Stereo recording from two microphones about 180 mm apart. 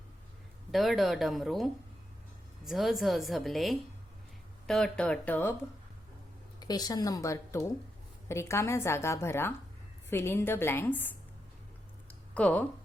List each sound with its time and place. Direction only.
0.7 s a woman's voice: centre (ahead or behind)
2.6 s a woman's voice: centre (ahead or behind)
6.6 s a woman's voice: 20° left (ahead or behind)
12.3 s speech: 5° left (ahead or behind)